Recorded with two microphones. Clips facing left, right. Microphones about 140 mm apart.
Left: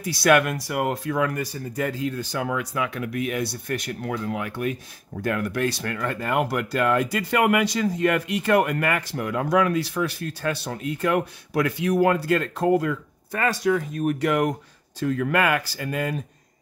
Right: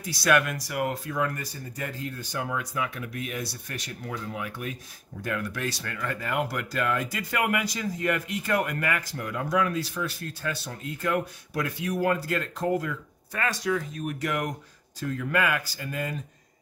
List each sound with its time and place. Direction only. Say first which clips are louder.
0.0 s speech: left 5 dB; 65° left (ahead or behind)
5.2 s speech: left 6 dB; 60° left (ahead or behind)
13.3 s speech: left 5 dB; 50° left (ahead or behind)
15.0 s speech: left 5 dB; 80° left